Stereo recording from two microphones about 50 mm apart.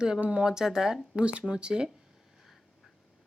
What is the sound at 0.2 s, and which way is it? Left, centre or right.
Speech, right.